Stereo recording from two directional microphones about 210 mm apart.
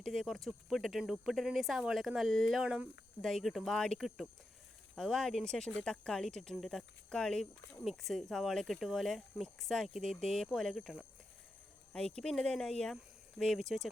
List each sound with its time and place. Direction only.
0.0 s speech: centre (ahead or behind)